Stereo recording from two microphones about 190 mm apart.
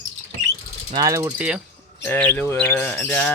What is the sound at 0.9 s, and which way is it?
Speech, 20° right (ahead or behind).